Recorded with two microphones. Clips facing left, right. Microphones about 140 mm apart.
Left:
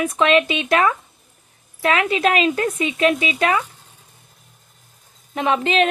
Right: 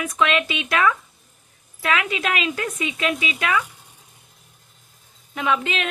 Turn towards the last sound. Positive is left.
turn(degrees=35)  # may be behind; listen again after turning